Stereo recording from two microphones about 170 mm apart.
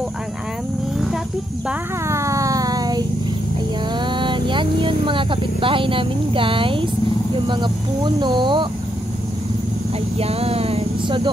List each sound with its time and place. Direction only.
1.7 s music: 15° right (ahead or behind)
4.0 s speech: 30° right (ahead or behind)
10.1 s a sound: 35° right (ahead or behind)